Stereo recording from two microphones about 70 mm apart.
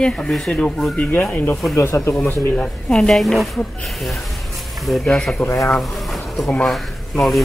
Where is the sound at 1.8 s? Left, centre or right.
Left.